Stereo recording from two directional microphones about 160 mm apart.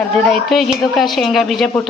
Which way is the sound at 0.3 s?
Centre (ahead or behind).